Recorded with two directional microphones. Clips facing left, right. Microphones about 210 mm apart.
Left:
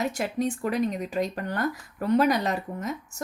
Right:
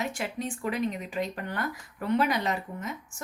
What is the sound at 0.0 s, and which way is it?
Speech, 40° left (ahead or behind).